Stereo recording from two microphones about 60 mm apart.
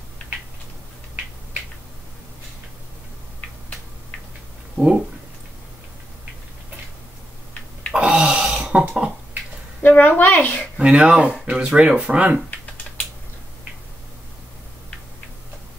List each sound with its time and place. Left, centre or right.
4.7 s speech: centre
7.9 s a sound: centre
9.8 s a woman's voice: left
10.8 s speech: centre